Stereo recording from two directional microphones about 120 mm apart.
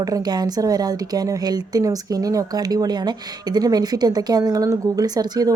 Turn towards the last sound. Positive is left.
turn(degrees=-35)  # may be behind; listen again after turning